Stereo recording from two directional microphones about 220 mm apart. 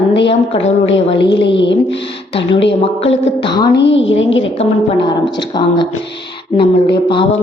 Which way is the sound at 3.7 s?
55° left (ahead or behind).